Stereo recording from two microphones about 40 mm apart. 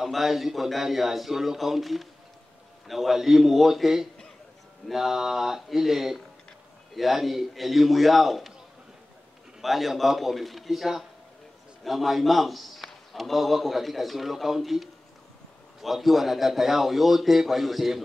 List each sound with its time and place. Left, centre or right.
0.0 s a man's voice: centre
9.6 s a man's voice: centre